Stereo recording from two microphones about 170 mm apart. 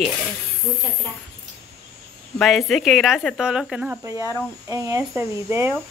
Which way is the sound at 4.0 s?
20° right (ahead or behind).